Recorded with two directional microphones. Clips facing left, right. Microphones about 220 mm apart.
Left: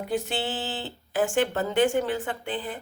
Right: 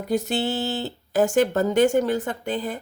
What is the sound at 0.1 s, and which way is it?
Speech, 40° right (ahead or behind).